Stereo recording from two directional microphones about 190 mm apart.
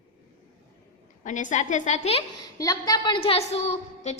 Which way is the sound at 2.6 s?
20° left (ahead or behind).